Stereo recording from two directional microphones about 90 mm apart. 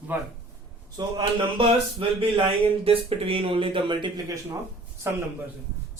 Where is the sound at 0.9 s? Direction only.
60° right (ahead or behind).